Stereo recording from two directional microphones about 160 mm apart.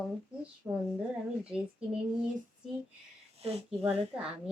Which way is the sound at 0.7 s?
10° right (ahead or behind).